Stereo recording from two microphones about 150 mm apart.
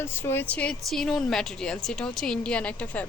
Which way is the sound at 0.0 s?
15° left (ahead or behind).